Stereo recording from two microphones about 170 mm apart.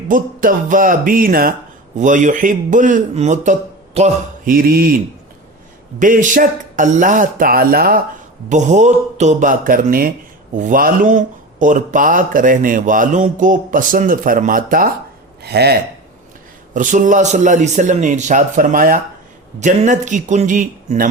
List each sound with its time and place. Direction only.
0.1 s a man's voice: 55° right (ahead or behind)
4.4 s speech: 60° right (ahead or behind)
6.0 s speech: 50° right (ahead or behind)
8.4 s speech: 45° right (ahead or behind)
15.4 s speech: 70° right (ahead or behind)
16.7 s speech: 50° right (ahead or behind)